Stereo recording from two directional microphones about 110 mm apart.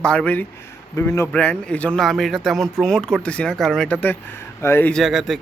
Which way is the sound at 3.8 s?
15° left (ahead or behind).